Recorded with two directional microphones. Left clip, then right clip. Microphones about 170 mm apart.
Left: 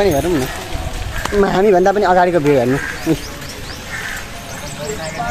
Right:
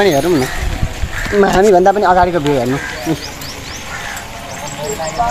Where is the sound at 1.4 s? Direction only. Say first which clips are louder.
Right 3 dB; 30° right (ahead or behind).